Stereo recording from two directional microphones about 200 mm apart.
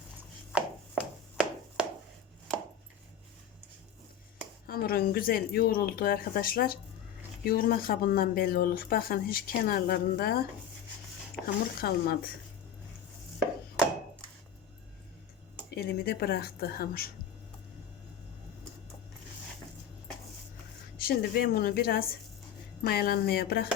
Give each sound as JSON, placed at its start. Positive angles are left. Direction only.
{"t": 1.4, "sound": "a sound", "side_deg": -5}
{"t": 4.6, "sound": "speech", "side_deg": 50}
{"t": 11.4, "sound": "speech", "side_deg": 50}
{"t": 15.7, "sound": "speech", "side_deg": 50}
{"t": 21.0, "sound": "speech", "side_deg": 50}